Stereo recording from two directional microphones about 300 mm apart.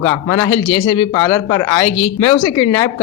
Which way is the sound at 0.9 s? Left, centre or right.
Centre.